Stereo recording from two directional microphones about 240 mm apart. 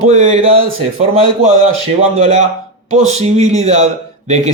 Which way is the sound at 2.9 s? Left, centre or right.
Right.